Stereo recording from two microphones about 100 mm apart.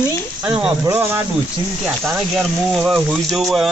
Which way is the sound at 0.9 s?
20° right (ahead or behind).